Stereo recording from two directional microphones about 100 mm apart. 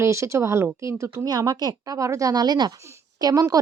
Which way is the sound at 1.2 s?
40° right (ahead or behind).